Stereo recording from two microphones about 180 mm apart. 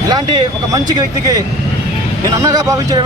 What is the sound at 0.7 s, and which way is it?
Speech, 20° right (ahead or behind).